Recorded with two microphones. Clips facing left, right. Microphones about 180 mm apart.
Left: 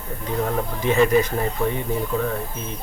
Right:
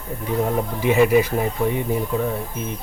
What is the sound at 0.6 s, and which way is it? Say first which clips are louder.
Speech: right 1 dB; 10° right (ahead or behind).